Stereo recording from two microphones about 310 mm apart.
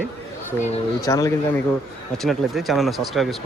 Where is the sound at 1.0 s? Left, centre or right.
Centre.